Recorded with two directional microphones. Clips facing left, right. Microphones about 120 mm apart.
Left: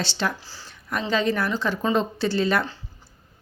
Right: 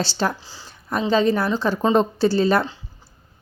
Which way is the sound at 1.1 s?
35° right (ahead or behind).